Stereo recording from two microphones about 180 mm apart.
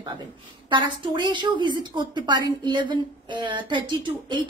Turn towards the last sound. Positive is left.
turn(degrees=-25)  # may be behind; listen again after turning